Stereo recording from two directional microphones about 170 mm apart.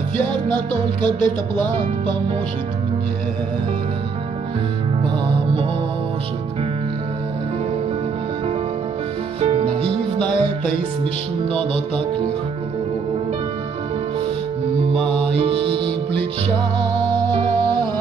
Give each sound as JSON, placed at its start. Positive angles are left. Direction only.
{"t": 1.0, "sound": "music", "side_deg": -25}
{"t": 9.4, "sound": "music", "side_deg": -35}
{"t": 14.9, "sound": "music", "side_deg": -35}